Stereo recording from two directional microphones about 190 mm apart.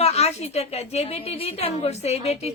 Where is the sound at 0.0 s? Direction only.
35° left (ahead or behind).